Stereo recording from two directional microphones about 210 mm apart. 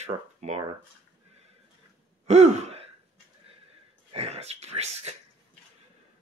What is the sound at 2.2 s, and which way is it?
Gasp, 30° right (ahead or behind).